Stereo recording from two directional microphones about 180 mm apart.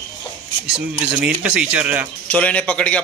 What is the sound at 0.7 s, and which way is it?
Speech, 5° right (ahead or behind).